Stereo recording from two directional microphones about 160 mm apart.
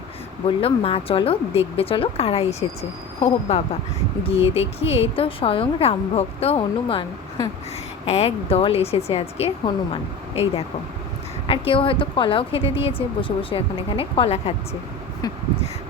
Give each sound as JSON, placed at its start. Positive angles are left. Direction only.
{"t": 0.4, "sound": "a woman's voice", "side_deg": 35}
{"t": 8.0, "sound": "a woman's voice", "side_deg": 40}